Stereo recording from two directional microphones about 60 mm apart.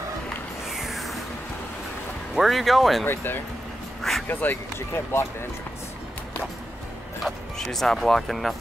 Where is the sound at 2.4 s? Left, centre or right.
Centre.